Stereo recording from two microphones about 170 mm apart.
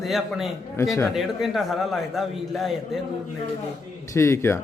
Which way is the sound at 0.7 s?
20° left (ahead or behind).